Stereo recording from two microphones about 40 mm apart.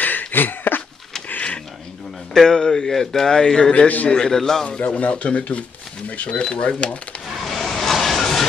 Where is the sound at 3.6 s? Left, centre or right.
Left.